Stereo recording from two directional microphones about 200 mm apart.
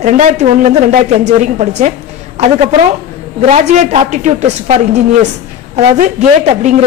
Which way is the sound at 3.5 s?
35° right (ahead or behind).